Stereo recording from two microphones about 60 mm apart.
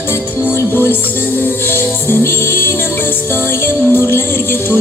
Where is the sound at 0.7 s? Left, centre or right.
Left.